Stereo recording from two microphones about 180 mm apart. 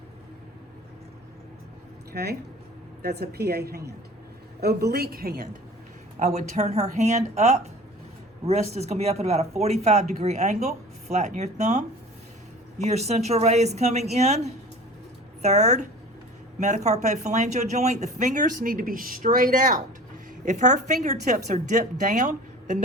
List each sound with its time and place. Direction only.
3.0 s a woman's voice: 60° right (ahead or behind)
6.1 s a woman's voice: 40° right (ahead or behind)